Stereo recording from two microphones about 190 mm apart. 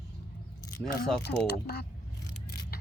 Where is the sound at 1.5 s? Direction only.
60° left (ahead or behind).